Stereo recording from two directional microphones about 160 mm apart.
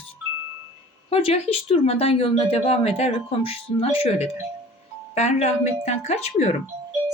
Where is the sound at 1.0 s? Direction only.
40° left (ahead or behind).